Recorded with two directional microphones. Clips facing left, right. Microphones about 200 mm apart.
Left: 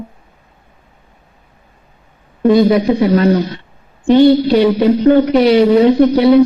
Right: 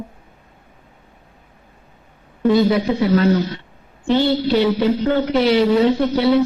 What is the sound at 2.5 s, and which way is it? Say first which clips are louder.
Speech: left 5 dB; 15° left (ahead or behind).